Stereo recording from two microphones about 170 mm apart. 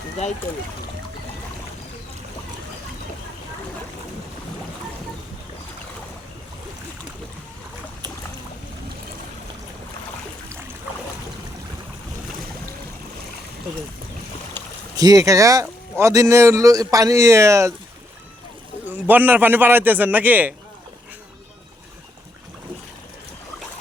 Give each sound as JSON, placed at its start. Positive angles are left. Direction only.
{"t": 14.9, "sound": "speech", "side_deg": -20}
{"t": 19.0, "sound": "a man's voice", "side_deg": -10}